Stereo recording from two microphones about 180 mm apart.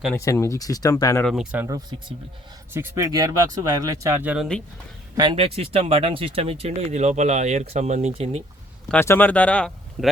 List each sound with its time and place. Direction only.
0.2 s speech: 15° left (ahead or behind)
1.2 s speech: centre (ahead or behind)
1.6 s speech: 20° right (ahead or behind)
5.1 s speech: 25° right (ahead or behind)
8.9 s speech: 10° left (ahead or behind)